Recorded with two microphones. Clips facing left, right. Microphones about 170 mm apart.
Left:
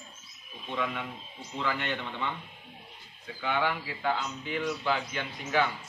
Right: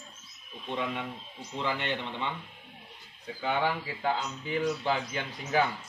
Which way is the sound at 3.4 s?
30° right (ahead or behind).